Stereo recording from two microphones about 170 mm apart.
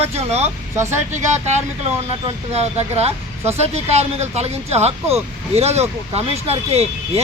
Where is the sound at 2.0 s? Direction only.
40° right (ahead or behind).